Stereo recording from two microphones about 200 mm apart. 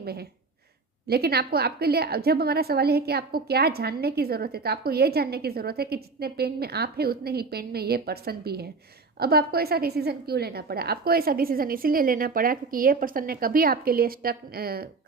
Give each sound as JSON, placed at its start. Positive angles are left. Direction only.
{"t": 0.0, "sound": "a woman's voice", "side_deg": -50}